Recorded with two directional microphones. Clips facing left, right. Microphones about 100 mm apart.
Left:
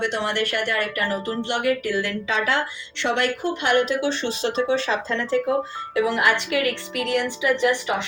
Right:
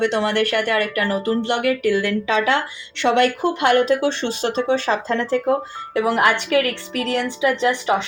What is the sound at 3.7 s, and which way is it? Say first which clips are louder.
A woman's voice: right 4 dB; 45° right (ahead or behind).